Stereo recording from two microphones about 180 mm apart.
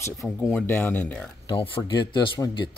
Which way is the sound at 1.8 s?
25° left (ahead or behind).